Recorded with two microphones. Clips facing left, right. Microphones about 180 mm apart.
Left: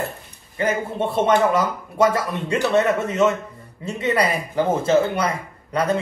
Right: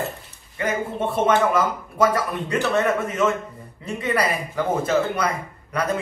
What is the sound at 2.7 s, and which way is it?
Speech, 25° left (ahead or behind).